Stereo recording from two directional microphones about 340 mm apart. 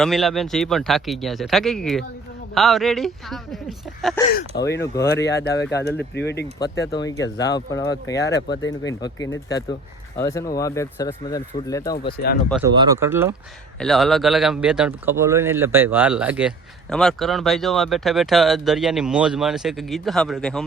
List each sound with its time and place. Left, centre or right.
0.0 s speech: centre
4.3 s speech: left
4.6 s speech: centre
5.4 s speech: left
5.6 s speech: centre
6.0 s speech: left
6.6 s speech: centre
12.1 s speech: left
12.5 s speech: centre